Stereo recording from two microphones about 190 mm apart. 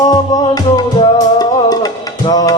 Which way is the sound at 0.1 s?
20° left (ahead or behind).